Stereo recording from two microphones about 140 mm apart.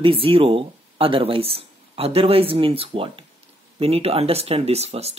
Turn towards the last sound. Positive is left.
turn(degrees=-50)  # may be behind; listen again after turning